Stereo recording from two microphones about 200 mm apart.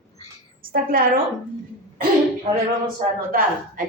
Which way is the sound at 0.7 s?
45° right (ahead or behind).